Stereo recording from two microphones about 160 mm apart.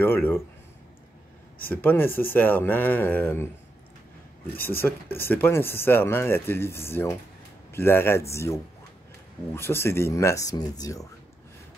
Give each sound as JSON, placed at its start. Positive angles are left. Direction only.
{"t": 0.0, "sound": "speech", "side_deg": 15}
{"t": 1.7, "sound": "speech", "side_deg": 15}
{"t": 4.6, "sound": "speech", "side_deg": 15}